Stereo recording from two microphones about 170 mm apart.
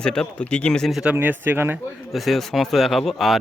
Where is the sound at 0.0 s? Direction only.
5° left (ahead or behind).